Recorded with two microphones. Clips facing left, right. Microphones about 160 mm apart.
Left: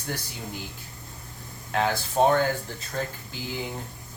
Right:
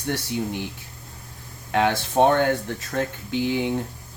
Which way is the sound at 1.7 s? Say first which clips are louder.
Right 4 dB; 70° right (ahead or behind).